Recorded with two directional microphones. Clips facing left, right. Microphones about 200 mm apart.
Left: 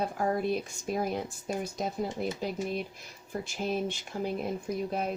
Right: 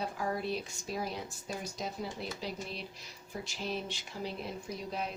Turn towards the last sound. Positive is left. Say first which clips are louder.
# left 6 dB
turn(degrees=50)  # may be behind; listen again after turning